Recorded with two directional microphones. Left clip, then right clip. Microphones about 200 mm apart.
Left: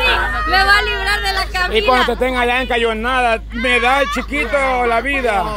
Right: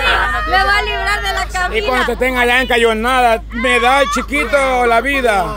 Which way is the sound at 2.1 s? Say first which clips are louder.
Right 3 dB; 5° right (ahead or behind).